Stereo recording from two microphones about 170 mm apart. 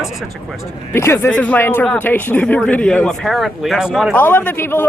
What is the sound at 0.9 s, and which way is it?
Speech, 15° left (ahead or behind).